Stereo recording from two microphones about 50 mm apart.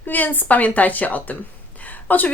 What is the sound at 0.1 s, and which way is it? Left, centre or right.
Speech, left.